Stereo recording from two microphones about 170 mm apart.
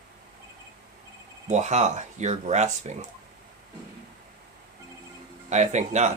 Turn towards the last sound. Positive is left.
turn(degrees=-45)  # may be behind; listen again after turning